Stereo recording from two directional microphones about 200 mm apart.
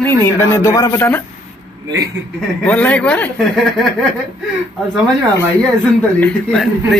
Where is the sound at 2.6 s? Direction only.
5° left (ahead or behind).